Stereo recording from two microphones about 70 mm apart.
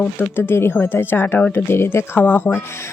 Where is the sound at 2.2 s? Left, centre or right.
Left.